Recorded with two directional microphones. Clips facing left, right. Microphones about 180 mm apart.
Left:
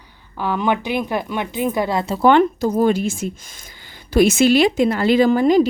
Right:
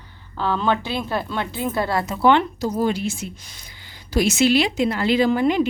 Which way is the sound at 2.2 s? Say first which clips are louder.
Left 4 dB; 45° left (ahead or behind).